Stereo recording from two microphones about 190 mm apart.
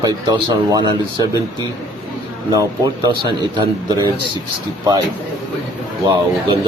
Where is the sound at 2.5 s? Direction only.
20° right (ahead or behind).